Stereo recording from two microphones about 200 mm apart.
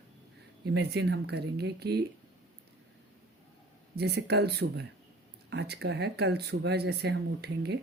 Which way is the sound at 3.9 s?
55° right (ahead or behind).